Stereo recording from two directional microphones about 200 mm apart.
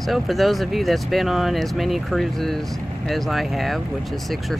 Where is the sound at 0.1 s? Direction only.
Centre (ahead or behind).